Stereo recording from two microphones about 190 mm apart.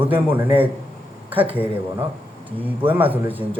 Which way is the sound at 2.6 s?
10° right (ahead or behind).